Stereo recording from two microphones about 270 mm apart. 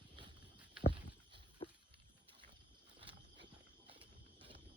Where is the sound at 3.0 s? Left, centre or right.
Centre.